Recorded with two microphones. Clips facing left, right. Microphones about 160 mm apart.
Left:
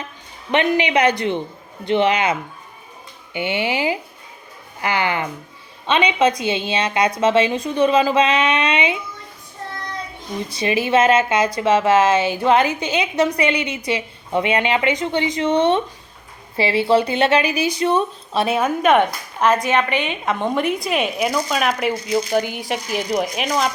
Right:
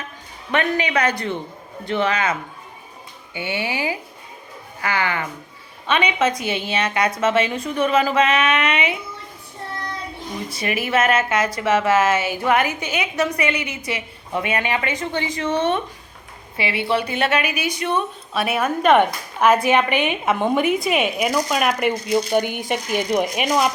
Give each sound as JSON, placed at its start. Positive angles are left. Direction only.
{"t": 0.5, "sound": "a woman's voice", "side_deg": 25}
{"t": 3.3, "sound": "a woman's voice", "side_deg": 20}
{"t": 10.5, "sound": "a woman's voice", "side_deg": 25}
{"t": 11.7, "sound": "a woman's voice", "side_deg": 25}
{"t": 16.6, "sound": "a woman's voice", "side_deg": 35}
{"t": 18.6, "sound": "speech", "side_deg": 5}
{"t": 19.6, "sound": "a woman's voice", "side_deg": -10}